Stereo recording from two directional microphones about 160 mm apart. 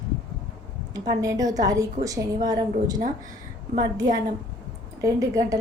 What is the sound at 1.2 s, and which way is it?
A woman's voice, 20° right (ahead or behind).